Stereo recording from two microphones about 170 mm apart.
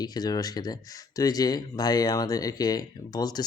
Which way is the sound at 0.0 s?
25° left (ahead or behind).